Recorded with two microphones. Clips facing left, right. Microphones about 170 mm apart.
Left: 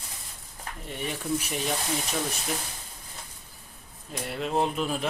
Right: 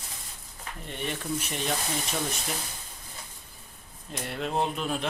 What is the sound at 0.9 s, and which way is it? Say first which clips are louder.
Speech: left 2 dB; 5° left (ahead or behind).